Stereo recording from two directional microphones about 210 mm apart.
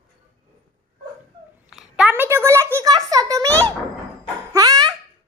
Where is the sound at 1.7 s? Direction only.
5° right (ahead or behind).